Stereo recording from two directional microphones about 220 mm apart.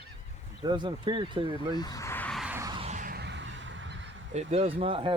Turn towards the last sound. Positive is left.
turn(degrees=-25)  # may be behind; listen again after turning